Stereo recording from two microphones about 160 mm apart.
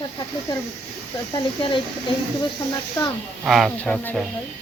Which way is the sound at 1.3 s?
30° left (ahead or behind).